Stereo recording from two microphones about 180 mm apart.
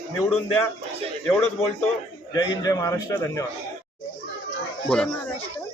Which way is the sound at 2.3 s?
20° left (ahead or behind).